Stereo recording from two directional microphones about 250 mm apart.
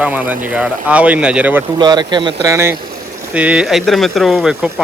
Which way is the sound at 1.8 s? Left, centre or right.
Centre.